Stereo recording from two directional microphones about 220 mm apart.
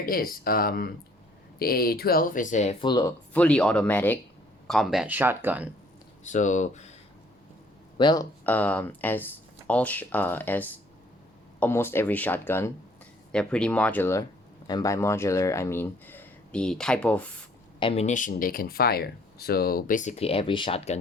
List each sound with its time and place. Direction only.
0.0 s speech: 40° left (ahead or behind)
2.8 s speech: 15° left (ahead or behind); by 5.6 s 10° right (ahead or behind)
6.2 s speech: 35° left (ahead or behind)
7.9 s speech: 20° left (ahead or behind)
17.7 s speech: 25° left (ahead or behind)